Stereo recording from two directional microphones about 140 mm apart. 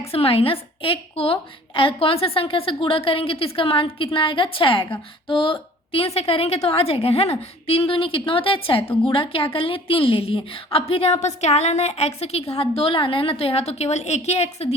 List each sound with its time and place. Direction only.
0.1 s a woman's voice: 40° left (ahead or behind)